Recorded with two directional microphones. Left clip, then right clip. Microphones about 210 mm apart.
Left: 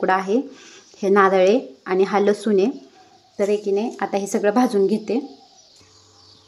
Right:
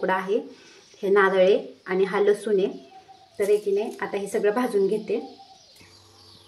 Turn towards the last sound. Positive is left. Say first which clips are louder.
# left 4 dB
turn(degrees=50)  # may be behind; listen again after turning